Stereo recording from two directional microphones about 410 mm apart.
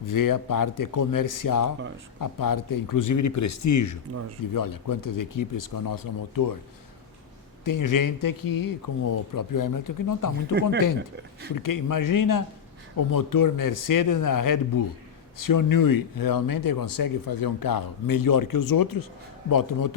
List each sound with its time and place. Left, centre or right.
0.0 s speech: left
7.6 s speech: left
10.5 s speech: right
11.5 s speech: left